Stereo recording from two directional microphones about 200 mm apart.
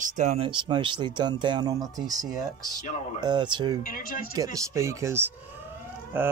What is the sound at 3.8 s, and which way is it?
Speech, 45° left (ahead or behind).